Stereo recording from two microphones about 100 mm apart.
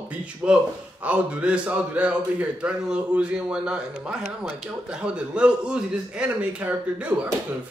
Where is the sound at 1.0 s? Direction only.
15° right (ahead or behind).